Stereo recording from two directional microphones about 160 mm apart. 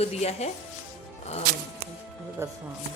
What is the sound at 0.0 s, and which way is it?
Speech, 40° left (ahead or behind).